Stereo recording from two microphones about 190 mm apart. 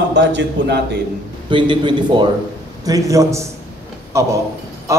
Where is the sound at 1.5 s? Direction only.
25° right (ahead or behind).